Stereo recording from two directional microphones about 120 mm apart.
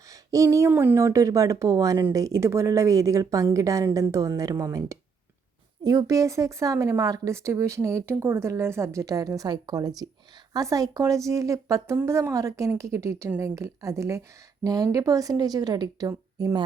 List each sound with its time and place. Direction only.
0.1 s a woman's voice: 25° right (ahead or behind)